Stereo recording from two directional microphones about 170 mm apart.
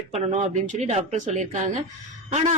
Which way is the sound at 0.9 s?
40° right (ahead or behind).